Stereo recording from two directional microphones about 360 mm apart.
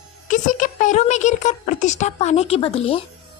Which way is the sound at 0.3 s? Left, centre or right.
Left.